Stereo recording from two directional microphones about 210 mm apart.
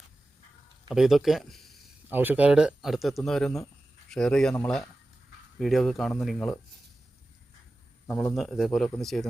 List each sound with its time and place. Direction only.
0.9 s a sound: centre (ahead or behind)
2.1 s speech: 10° right (ahead or behind)
8.0 s speech: 5° left (ahead or behind)